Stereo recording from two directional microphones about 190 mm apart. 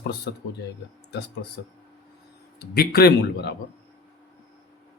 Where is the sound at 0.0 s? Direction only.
65° left (ahead or behind).